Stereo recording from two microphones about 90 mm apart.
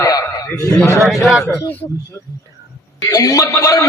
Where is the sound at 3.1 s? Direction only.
40° left (ahead or behind).